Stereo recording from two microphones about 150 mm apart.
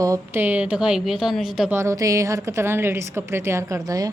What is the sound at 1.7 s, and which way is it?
A woman's voice, 20° right (ahead or behind).